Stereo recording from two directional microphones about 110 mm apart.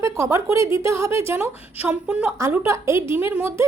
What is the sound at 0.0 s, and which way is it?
Speech, 25° right (ahead or behind).